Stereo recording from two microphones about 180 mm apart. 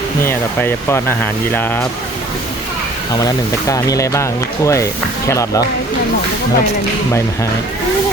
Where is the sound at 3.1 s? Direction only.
20° left (ahead or behind).